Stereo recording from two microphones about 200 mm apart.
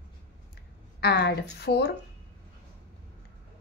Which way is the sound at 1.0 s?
55° left (ahead or behind).